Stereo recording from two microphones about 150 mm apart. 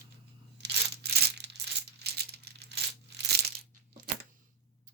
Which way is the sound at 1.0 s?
90° right.